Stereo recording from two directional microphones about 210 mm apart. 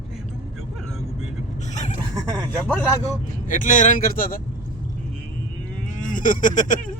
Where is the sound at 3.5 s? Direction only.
40° left (ahead or behind).